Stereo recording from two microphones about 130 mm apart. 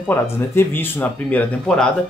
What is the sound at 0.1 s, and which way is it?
Speech, 15° left (ahead or behind).